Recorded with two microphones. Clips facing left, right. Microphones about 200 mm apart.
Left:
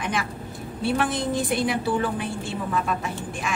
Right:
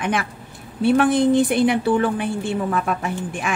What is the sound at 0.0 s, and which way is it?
A woman's voice, 60° right (ahead or behind).